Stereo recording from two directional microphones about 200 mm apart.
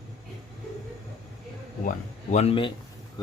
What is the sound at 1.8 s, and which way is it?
Speech, 35° left (ahead or behind).